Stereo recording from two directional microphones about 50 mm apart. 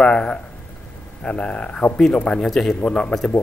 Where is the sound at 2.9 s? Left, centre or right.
Centre.